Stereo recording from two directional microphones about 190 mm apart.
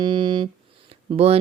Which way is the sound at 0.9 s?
30° right (ahead or behind).